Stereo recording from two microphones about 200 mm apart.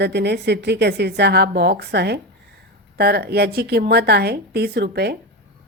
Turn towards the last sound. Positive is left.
turn(degrees=-55)  # may be behind; listen again after turning